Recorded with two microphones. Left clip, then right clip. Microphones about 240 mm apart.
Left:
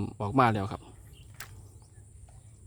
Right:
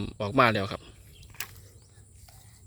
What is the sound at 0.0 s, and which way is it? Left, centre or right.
Speech, centre.